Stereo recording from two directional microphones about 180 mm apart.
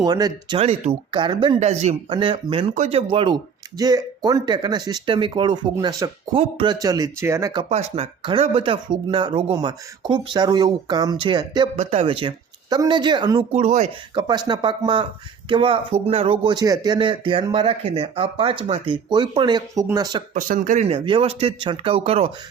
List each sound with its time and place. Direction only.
0.0 s speech: 20° right (ahead or behind)
0.6 s speech: 35° right (ahead or behind)
1.5 s speech: 40° right (ahead or behind)
2.0 s speech: 30° right (ahead or behind)
2.7 s speech: 40° right (ahead or behind)
3.1 s speech: 30° right (ahead or behind)
6.7 s speech: 20° right (ahead or behind)
7.7 s speech: 35° right (ahead or behind)
11.8 s speech: 35° right (ahead or behind)
14.2 s speech: 25° right (ahead or behind)
20.3 s speech: 45° right (ahead or behind)